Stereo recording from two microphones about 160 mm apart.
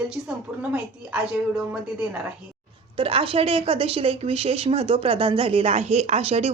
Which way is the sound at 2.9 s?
35° right (ahead or behind).